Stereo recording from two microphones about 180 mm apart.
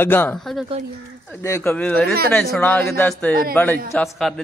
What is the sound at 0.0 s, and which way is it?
Speech, 10° left (ahead or behind).